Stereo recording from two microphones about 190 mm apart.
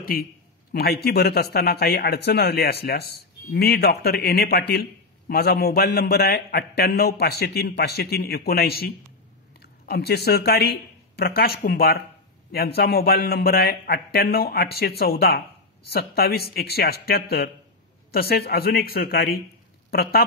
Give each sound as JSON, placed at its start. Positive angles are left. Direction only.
{"t": 0.0, "sound": "a man's voice", "side_deg": 50}